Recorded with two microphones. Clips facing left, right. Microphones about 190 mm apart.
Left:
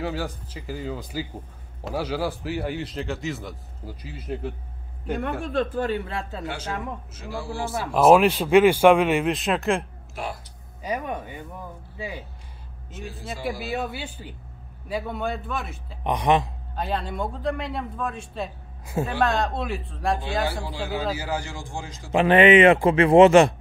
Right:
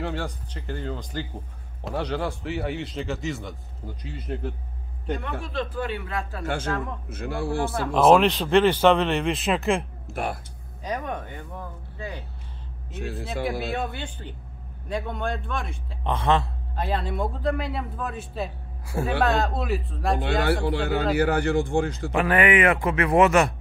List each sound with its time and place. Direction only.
0.0 s a man's voice: 5° left (ahead or behind)
5.4 s speech: 50° left (ahead or behind); by 6.4 s 30° left (ahead or behind)
6.4 s speech: 50° right (ahead or behind)
7.7 s speech: 5° left (ahead or behind)
10.1 s speech: 55° right (ahead or behind)
10.8 s speech: 10° left (ahead or behind)
13.4 s a man's voice: centre (ahead or behind)
16.0 s speech: 15° left (ahead or behind)
16.7 s a man's voice: centre (ahead or behind)
20.4 s speech: 65° right (ahead or behind)
22.1 s speech: 25° left (ahead or behind)